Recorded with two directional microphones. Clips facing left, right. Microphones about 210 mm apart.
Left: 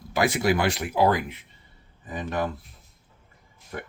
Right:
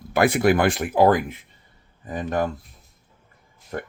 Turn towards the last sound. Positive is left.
turn(degrees=-40)  # may be behind; listen again after turning